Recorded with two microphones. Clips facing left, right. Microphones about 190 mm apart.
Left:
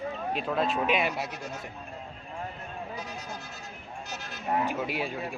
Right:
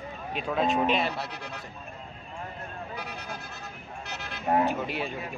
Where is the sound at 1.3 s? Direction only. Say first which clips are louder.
Left 2 dB; 65° right (ahead or behind).